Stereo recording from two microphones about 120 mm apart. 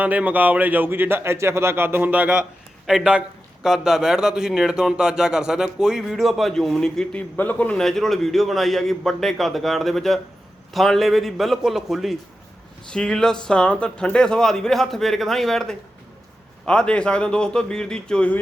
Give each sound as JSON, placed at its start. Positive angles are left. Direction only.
{"t": 0.0, "sound": "a man's voice", "side_deg": -15}